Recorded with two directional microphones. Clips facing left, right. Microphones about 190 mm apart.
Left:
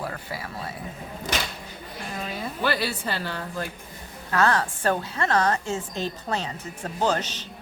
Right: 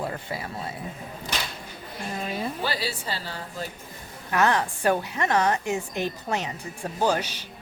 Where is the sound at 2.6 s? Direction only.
60° left (ahead or behind).